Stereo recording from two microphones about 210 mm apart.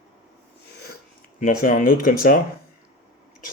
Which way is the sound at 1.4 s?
40° left (ahead or behind).